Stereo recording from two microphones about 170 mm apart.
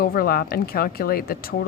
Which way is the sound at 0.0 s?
60° left (ahead or behind).